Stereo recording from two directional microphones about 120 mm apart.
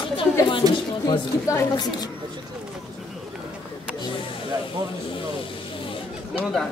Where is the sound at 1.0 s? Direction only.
30° left (ahead or behind).